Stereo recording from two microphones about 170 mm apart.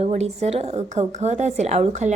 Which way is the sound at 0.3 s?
40° right (ahead or behind).